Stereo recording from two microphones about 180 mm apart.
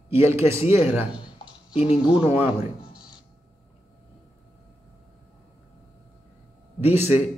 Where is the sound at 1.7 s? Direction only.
30° left (ahead or behind).